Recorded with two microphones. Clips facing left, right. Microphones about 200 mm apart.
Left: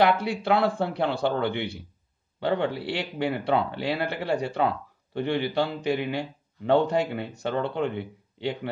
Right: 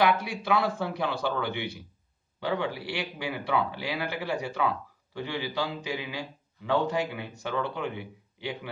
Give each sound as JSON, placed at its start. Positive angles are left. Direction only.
{"t": 0.0, "sound": "a man's voice", "side_deg": 60}